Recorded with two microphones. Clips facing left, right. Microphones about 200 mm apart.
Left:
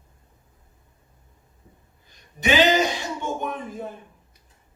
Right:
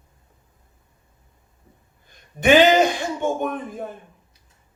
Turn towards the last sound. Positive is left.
turn(degrees=-50)  # may be behind; listen again after turning